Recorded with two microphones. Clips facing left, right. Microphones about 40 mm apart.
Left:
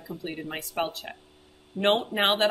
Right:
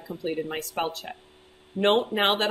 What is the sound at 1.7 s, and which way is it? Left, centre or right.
Speech, right.